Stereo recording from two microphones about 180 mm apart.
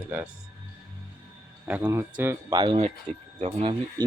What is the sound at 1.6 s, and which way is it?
Speech, 10° right (ahead or behind).